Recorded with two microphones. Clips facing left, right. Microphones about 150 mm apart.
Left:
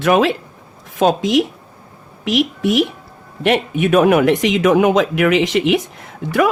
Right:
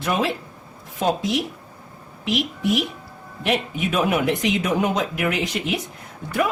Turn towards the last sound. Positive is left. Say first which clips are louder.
# left 7 dB
turn(degrees=85)